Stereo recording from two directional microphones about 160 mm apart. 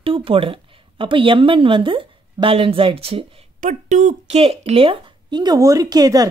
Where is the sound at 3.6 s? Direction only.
50° right (ahead or behind).